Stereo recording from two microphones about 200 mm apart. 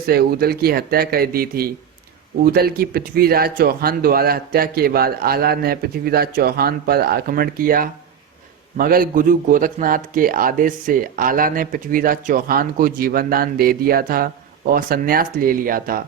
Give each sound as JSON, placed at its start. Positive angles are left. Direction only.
{"t": 0.0, "sound": "speech", "side_deg": -50}